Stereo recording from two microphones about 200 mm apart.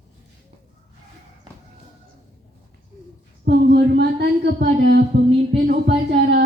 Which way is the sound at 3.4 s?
55° right (ahead or behind).